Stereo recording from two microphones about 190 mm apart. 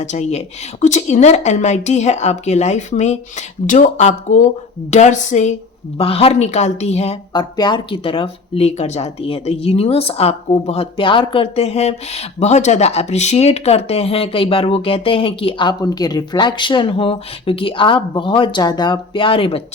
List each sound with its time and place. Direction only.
0.0 s a woman's voice: 40° left (ahead or behind)